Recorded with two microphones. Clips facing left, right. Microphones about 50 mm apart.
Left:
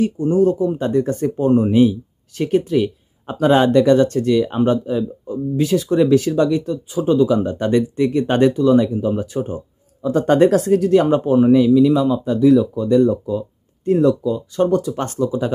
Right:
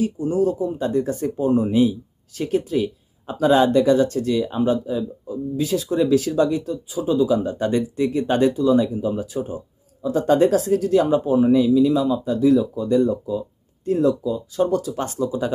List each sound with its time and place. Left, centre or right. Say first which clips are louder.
0.0 s speech: left 5 dB; left
4.8 s speech: left 4 dB; left
10.7 s speech: left 4 dB; left